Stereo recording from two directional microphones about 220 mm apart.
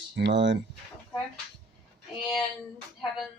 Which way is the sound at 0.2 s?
55° right (ahead or behind).